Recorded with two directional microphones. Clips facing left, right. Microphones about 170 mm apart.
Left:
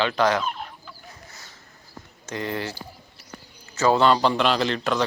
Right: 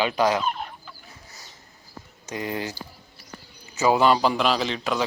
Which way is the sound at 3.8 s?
10° right (ahead or behind).